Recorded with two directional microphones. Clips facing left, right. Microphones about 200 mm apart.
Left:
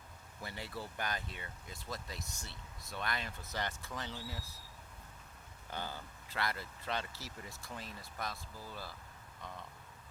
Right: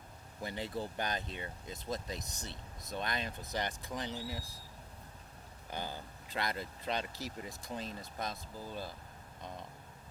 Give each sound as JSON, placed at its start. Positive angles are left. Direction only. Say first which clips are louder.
{"t": 0.4, "sound": "speech", "louder": "right 6 dB", "side_deg": -20}
{"t": 5.7, "sound": "speech", "louder": "right 2 dB", "side_deg": -15}